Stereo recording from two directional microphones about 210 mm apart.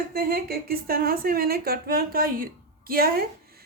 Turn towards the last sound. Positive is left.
turn(degrees=-45)  # may be behind; listen again after turning